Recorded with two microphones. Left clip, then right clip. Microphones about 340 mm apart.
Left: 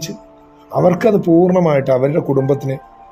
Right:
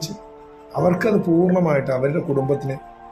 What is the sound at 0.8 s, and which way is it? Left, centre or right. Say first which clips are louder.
Speech: left 6 dB; centre.